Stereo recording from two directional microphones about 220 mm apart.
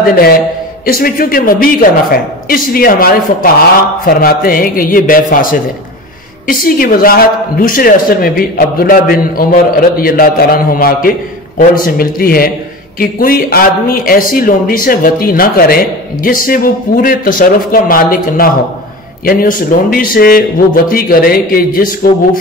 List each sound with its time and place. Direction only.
0.8 s a woman's voice: 40° left (ahead or behind)